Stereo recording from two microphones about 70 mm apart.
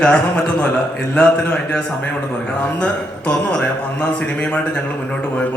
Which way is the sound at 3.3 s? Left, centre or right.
Centre.